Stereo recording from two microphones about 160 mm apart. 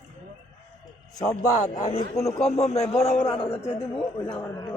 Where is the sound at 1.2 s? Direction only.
20° left (ahead or behind).